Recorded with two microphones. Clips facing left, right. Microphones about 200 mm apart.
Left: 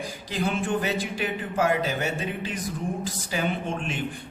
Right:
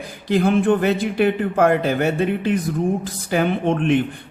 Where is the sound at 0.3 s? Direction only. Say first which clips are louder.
Right 11 dB; 55° right (ahead or behind).